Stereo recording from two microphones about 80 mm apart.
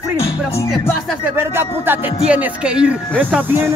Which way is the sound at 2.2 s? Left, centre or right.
Centre.